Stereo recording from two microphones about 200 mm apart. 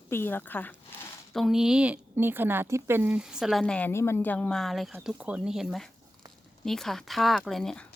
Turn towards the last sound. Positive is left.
turn(degrees=0)  # may be behind; listen again after turning